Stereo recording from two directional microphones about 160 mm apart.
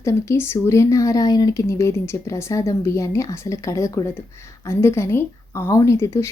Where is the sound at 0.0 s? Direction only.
15° left (ahead or behind).